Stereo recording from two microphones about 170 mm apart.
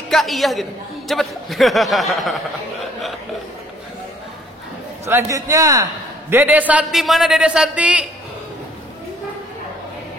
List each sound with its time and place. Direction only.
0.1 s a man's voice: centre (ahead or behind)
5.0 s speech: 15° right (ahead or behind)
6.3 s a man's voice: 10° right (ahead or behind)